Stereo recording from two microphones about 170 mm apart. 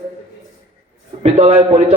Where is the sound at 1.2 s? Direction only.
40° right (ahead or behind).